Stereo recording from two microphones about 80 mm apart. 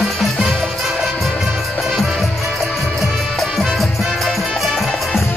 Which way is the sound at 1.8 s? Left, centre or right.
Centre.